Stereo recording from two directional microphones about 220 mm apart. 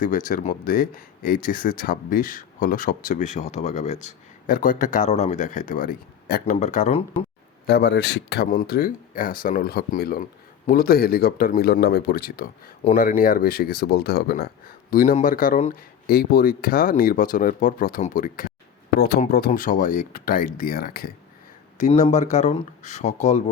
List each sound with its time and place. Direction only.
0.0 s speech: 35° left (ahead or behind)
6.4 s speech: 30° left (ahead or behind)
7.7 s speech: 50° left (ahead or behind); by 23.4 s 30° left (ahead or behind)